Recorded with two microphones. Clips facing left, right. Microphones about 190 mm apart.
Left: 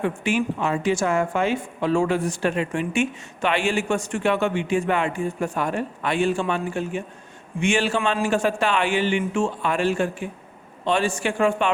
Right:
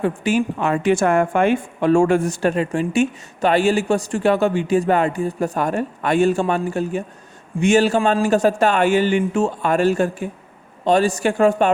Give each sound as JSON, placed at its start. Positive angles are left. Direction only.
{"t": 0.0, "sound": "a woman's voice", "side_deg": -40}
{"t": 0.6, "sound": "a woman's voice", "side_deg": -60}